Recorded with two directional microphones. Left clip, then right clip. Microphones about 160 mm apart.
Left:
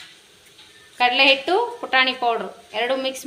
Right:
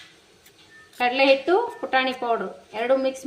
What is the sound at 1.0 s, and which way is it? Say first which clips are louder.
Speech: left 3 dB; 35° right (ahead or behind).